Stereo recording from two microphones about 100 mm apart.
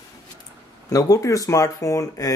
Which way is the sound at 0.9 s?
35° left (ahead or behind).